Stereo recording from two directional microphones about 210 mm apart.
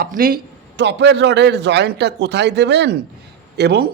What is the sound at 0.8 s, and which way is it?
A man's voice, 55° right (ahead or behind).